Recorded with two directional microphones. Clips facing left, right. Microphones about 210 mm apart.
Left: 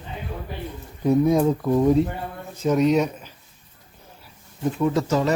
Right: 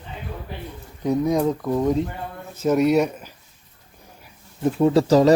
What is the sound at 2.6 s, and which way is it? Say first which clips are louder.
Speech: right 1 dB; 10° right (ahead or behind).